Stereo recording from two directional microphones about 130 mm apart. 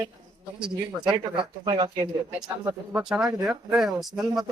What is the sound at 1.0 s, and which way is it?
Speech, 35° right (ahead or behind).